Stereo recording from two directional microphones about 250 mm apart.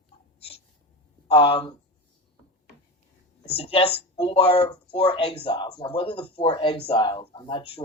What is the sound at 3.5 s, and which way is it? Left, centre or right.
Speech, left.